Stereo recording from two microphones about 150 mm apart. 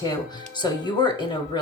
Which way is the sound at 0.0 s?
30° left (ahead or behind).